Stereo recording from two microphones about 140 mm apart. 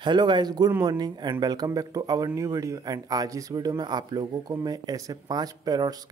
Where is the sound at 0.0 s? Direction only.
30° right (ahead or behind).